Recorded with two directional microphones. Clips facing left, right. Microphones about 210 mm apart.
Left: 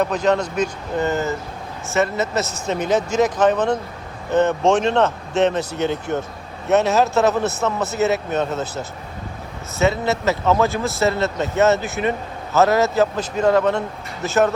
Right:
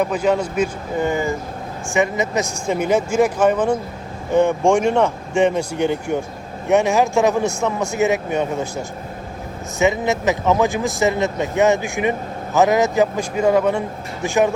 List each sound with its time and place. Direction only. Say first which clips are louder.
0.0 s speech: even; 10° right (ahead or behind)